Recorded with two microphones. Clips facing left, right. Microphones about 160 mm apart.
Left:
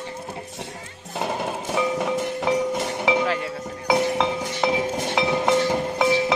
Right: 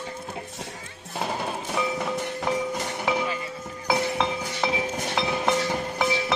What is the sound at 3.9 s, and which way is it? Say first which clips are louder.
Music: left 4 dB; 20° left (ahead or behind).